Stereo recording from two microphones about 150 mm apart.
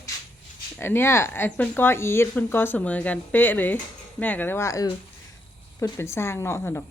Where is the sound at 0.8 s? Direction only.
15° left (ahead or behind).